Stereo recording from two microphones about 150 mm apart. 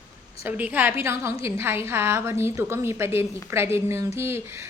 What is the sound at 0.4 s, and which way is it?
A woman's voice, 10° right (ahead or behind).